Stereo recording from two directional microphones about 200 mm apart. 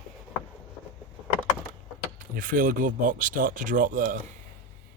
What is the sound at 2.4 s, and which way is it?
Speech, 45° right (ahead or behind).